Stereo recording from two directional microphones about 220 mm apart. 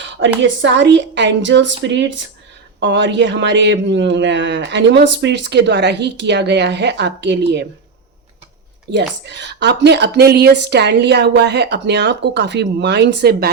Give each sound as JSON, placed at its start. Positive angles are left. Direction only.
{"t": 0.4, "sound": "speech", "side_deg": -55}
{"t": 8.9, "sound": "speech", "side_deg": -50}